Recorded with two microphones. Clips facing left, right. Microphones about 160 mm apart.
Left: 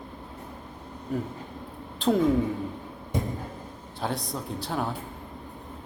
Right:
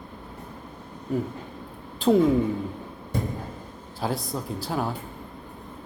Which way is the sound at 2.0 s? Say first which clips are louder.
Right 4 dB; centre (ahead or behind).